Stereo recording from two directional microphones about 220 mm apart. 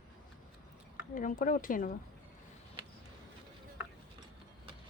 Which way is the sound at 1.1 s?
35° left (ahead or behind).